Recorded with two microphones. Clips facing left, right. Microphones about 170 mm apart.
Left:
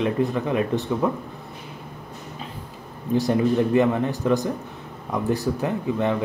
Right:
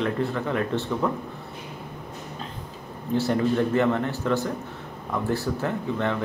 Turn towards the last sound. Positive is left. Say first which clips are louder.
# left 3 dB
turn(degrees=15)  # may be behind; listen again after turning